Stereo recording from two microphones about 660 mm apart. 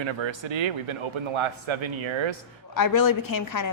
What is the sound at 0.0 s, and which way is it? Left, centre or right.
A man's voice, right.